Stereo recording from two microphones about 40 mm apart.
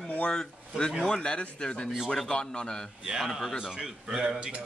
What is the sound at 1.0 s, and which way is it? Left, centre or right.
Speech, centre.